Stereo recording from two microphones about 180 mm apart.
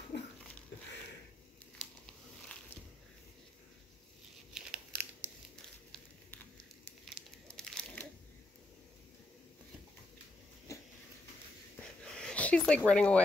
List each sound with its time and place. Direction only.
0.1 s dog: 70° left (ahead or behind)
4.6 s crumpling: 10° right (ahead or behind)
7.5 s crunch: 5° left (ahead or behind)
12.0 s a sound: 5° left (ahead or behind)